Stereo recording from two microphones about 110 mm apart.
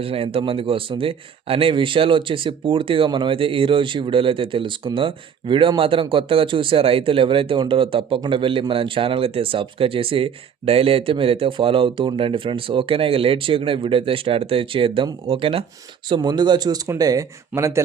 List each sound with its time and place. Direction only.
0.0 s a man's voice: 60° right (ahead or behind); by 17.8 s 25° right (ahead or behind)